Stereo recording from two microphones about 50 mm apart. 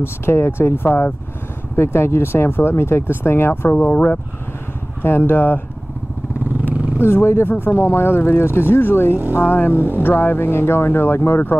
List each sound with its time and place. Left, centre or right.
0.0 s speech: left
0.8 s speech: left
1.8 s speech: left
5.0 s speech: left
7.0 s speech: left